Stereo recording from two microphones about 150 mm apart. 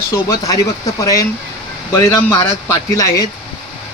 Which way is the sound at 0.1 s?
20° left (ahead or behind).